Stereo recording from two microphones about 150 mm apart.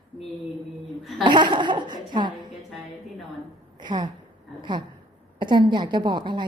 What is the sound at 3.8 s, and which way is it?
A woman's voice, 30° right (ahead or behind).